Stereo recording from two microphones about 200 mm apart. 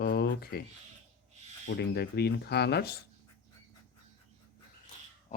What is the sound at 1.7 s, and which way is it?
Speech, 55° left (ahead or behind).